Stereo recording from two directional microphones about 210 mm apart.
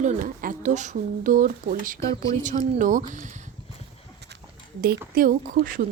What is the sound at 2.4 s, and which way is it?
Speech, 35° right (ahead or behind).